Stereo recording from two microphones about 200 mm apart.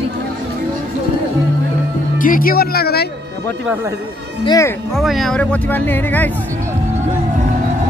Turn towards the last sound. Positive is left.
turn(degrees=10)  # may be behind; listen again after turning